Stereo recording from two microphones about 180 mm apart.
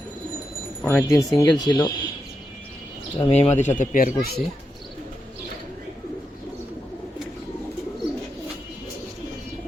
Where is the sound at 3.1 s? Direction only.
30° left (ahead or behind).